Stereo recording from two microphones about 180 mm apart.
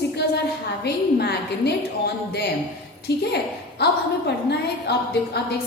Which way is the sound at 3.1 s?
65° left (ahead or behind).